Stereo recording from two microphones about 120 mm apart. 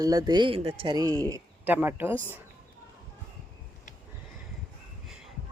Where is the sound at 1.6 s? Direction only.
15° right (ahead or behind).